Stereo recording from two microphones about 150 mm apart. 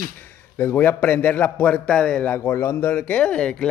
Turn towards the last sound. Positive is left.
turn(degrees=5)  # may be behind; listen again after turning